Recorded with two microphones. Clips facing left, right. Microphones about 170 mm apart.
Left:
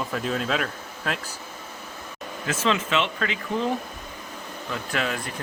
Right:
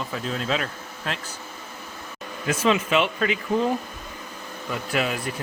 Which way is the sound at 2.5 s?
10° right (ahead or behind).